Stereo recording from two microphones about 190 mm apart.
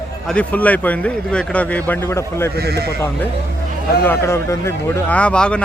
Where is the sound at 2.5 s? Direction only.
55° right (ahead or behind).